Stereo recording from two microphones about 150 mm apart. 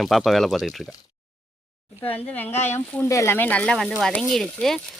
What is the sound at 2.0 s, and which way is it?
Speech, 10° left (ahead or behind).